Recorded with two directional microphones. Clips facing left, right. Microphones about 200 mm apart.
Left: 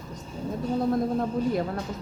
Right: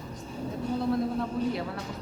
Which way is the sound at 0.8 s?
45° left (ahead or behind).